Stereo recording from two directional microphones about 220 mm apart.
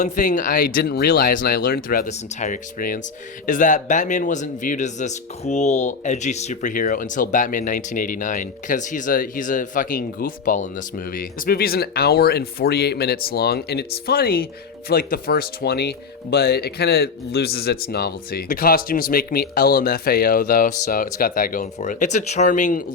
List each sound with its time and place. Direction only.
0.0 s speech: 35° left (ahead or behind)